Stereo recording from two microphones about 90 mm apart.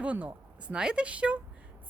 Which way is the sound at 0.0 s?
15° right (ahead or behind).